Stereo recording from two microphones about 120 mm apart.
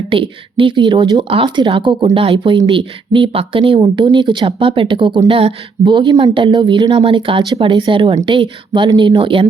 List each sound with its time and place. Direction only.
0.1 s speech: 45° right (ahead or behind)